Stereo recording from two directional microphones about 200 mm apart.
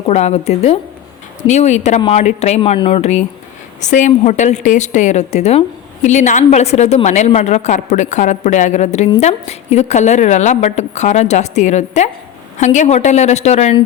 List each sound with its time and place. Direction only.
0.1 s a woman's voice: 35° left (ahead or behind)